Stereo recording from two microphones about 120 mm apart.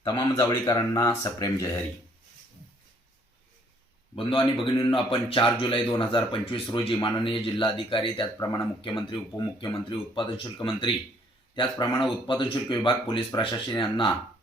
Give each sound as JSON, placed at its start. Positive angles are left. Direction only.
{"t": 0.0, "sound": "speech", "side_deg": 30}
{"t": 4.3, "sound": "speech", "side_deg": 45}